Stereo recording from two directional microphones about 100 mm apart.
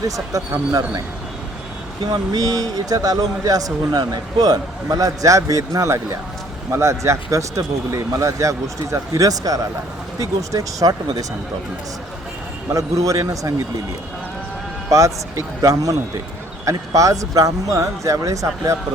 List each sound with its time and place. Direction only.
0.0 s speech: 35° right (ahead or behind)
2.0 s speech: 40° right (ahead or behind)
12.7 s speech: 35° right (ahead or behind)
14.8 s speech: 35° right (ahead or behind)